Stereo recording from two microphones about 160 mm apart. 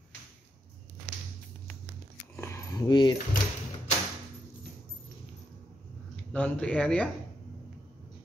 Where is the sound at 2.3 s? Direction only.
15° left (ahead or behind).